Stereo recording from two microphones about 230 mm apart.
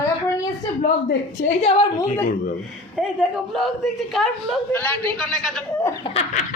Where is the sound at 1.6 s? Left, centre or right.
Left.